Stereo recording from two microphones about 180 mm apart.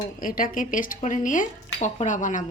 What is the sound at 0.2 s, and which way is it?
A woman's voice, 50° left (ahead or behind).